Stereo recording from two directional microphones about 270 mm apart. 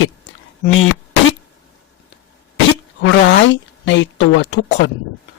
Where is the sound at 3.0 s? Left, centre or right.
Left.